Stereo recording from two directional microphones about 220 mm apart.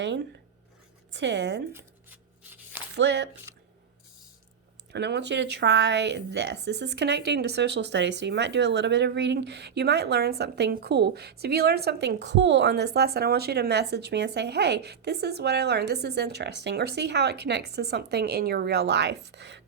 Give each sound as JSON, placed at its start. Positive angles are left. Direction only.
{"t": 0.0, "sound": "speech", "side_deg": -55}
{"t": 1.7, "sound": "a sound", "side_deg": -10}
{"t": 2.9, "sound": "speech", "side_deg": -50}
{"t": 4.9, "sound": "speech", "side_deg": -50}